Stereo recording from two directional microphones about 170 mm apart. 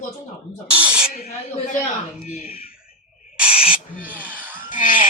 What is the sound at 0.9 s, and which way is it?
Speech, 5° right (ahead or behind).